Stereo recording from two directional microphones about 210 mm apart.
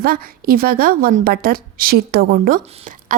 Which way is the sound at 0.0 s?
45° right (ahead or behind).